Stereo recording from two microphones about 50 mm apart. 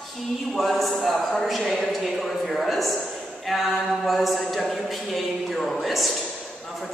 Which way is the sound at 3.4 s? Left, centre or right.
Centre.